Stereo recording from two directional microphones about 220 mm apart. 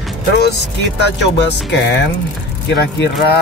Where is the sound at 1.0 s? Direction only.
50° left (ahead or behind).